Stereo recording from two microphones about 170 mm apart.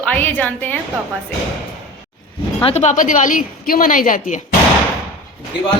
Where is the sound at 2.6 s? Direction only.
35° left (ahead or behind).